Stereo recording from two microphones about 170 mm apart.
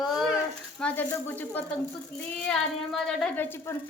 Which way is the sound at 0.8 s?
10° left (ahead or behind).